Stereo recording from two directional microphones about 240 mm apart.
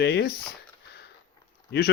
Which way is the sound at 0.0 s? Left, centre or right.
Left.